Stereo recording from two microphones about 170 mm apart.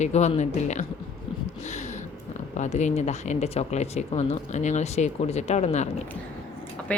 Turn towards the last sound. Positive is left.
turn(degrees=10)  # may be behind; listen again after turning